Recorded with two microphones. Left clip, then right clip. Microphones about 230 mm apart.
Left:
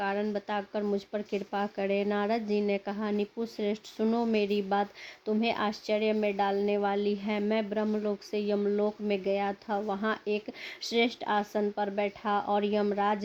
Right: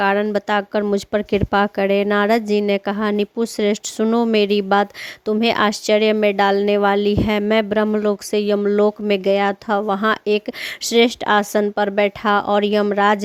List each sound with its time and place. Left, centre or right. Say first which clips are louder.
0.0 s speech: right 14 dB; right